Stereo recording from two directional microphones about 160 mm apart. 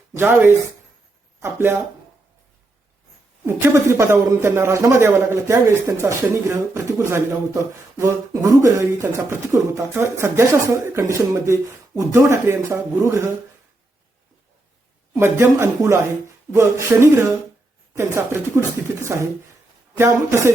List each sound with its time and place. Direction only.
0.2 s speech: 15° right (ahead or behind)
3.4 s speech: 20° right (ahead or behind)
15.1 s a man's voice: 15° right (ahead or behind)